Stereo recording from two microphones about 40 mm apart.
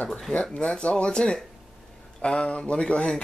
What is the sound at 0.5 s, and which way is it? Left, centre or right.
Speech, left.